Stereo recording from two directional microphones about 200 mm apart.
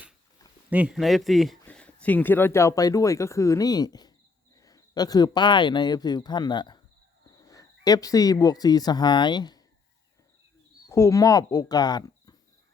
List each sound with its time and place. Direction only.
0.7 s speech: 5° right (ahead or behind); by 9.6 s 20° left (ahead or behind)
10.8 s speech: 15° left (ahead or behind)